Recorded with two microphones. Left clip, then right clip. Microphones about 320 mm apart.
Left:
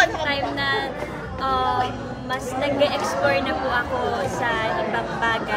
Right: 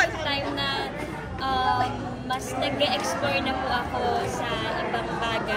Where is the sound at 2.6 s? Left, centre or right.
Centre.